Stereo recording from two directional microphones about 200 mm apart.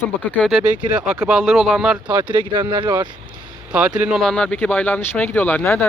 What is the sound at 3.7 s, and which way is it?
Speech, 5° right (ahead or behind).